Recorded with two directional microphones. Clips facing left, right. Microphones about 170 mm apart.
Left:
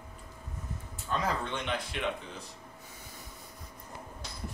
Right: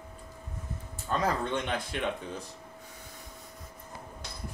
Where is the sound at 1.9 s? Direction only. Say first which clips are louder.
Right 3 dB; 45° right (ahead or behind).